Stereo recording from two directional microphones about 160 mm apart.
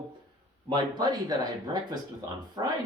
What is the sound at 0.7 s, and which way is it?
Speech, 25° right (ahead or behind).